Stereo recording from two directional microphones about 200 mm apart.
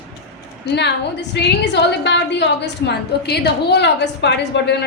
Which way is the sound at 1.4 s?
60° left (ahead or behind).